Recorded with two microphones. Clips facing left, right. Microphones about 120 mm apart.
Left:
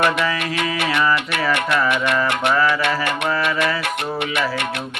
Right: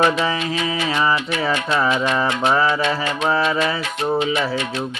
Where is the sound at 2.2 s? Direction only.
65° left (ahead or behind).